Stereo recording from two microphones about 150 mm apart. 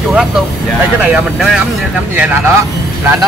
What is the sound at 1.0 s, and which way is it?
Speech, 5° right (ahead or behind).